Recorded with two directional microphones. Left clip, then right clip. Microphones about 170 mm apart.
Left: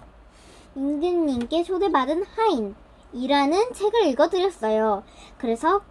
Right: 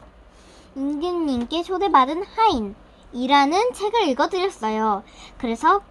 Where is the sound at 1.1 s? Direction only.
65° right (ahead or behind).